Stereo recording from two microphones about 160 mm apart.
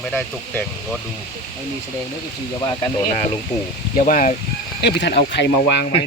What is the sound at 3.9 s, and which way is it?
Speech, 55° left (ahead or behind).